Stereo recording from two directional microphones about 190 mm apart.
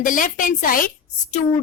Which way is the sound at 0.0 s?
45° left (ahead or behind).